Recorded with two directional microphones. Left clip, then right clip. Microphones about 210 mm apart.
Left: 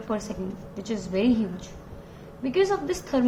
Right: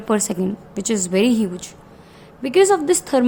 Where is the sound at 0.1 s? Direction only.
55° right (ahead or behind).